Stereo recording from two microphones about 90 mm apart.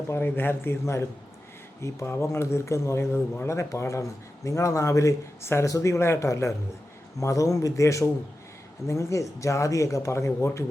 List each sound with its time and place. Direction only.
0.1 s a man's voice: 25° left (ahead or behind)